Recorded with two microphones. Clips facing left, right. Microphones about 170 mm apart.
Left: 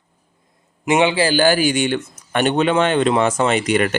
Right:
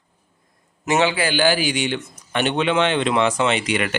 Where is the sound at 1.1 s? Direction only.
35° left (ahead or behind).